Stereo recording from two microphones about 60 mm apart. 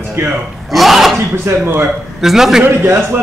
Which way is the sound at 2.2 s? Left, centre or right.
Centre.